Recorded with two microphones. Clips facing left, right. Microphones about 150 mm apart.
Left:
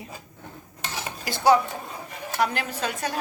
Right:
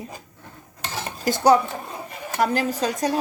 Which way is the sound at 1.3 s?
45° right (ahead or behind).